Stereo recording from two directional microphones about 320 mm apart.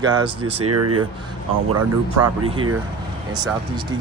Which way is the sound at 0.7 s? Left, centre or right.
Right.